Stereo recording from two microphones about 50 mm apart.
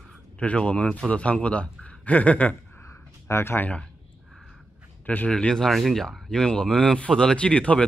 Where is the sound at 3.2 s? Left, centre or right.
Left.